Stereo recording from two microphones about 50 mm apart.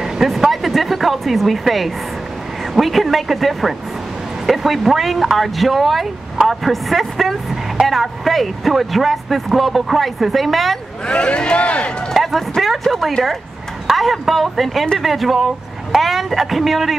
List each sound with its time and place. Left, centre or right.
0.0 s a sound: centre
2.7 s speech: centre
11.1 s speech: left
12.1 s speech: centre